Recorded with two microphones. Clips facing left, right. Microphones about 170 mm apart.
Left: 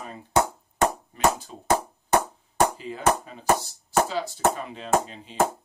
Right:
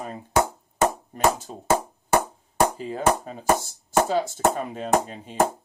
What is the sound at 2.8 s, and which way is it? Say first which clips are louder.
Speech: right 2 dB; 45° right (ahead or behind).